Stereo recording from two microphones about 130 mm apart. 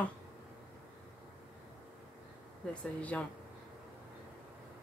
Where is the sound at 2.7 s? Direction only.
10° left (ahead or behind).